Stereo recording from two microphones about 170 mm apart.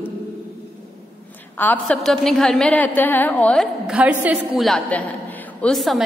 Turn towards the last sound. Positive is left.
turn(degrees=0)  # may be behind; listen again after turning